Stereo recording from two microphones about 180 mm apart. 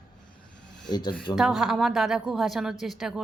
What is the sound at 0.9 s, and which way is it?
Speech, 25° left (ahead or behind).